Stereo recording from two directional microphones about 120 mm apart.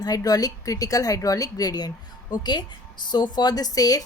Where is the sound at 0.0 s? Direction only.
30° left (ahead or behind).